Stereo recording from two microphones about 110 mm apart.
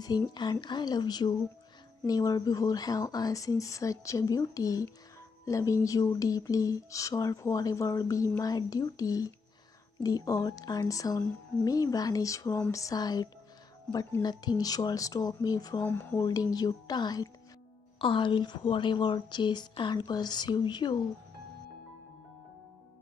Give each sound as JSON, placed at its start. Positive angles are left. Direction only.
{"t": 0.0, "sound": "speech", "side_deg": 40}
{"t": 15.8, "sound": "speech", "side_deg": 20}
{"t": 16.2, "sound": "speech", "side_deg": 35}
{"t": 17.9, "sound": "a woman's voice", "side_deg": 50}